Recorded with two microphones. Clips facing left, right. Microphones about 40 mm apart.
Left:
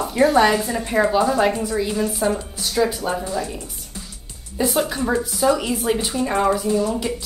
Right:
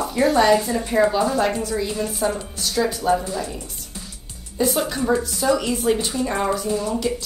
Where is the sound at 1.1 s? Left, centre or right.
Left.